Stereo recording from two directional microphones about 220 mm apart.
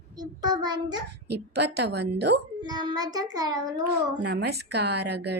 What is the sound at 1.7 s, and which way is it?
Speech, 50° right (ahead or behind).